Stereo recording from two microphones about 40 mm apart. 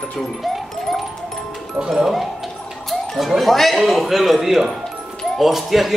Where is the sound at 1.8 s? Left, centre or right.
Centre.